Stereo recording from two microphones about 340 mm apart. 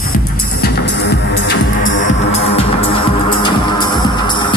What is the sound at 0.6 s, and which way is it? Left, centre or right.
Music, left.